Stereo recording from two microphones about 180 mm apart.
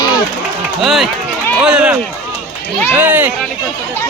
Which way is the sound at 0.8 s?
Centre (ahead or behind).